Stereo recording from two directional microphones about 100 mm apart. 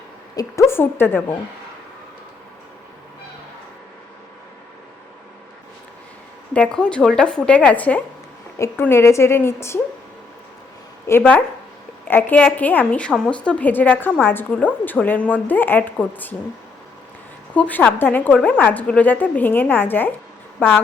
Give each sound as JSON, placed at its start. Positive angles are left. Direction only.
{"t": 0.3, "sound": "a woman's voice", "side_deg": 30}
{"t": 6.5, "sound": "a woman's voice", "side_deg": 10}
{"t": 8.8, "sound": "a woman's voice", "side_deg": 25}
{"t": 11.2, "sound": "a woman's voice", "side_deg": 15}
{"t": 17.5, "sound": "a woman's voice", "side_deg": 15}